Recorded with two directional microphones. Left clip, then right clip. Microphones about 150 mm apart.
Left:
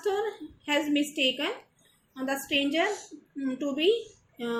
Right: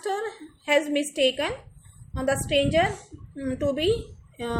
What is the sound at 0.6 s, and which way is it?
A woman's voice, 50° right (ahead or behind).